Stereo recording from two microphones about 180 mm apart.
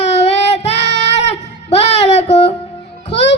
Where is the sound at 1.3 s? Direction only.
35° left (ahead or behind).